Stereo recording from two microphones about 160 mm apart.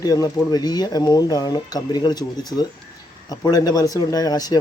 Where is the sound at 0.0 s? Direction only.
25° left (ahead or behind).